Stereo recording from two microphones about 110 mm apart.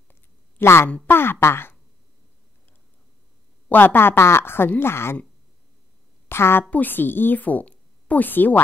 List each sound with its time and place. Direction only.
0.1 s a sound: 20° left (ahead or behind)
0.8 s speech: 15° left (ahead or behind)
3.6 s speech: 15° left (ahead or behind)
6.2 s a woman's voice: 20° left (ahead or behind)